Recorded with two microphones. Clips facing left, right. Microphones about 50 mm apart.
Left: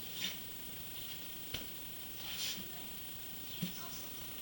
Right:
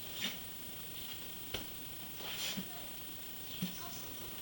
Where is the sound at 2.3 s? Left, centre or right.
Centre.